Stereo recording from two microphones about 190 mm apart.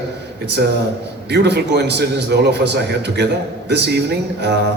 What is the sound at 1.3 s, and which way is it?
A man's voice, 60° right (ahead or behind).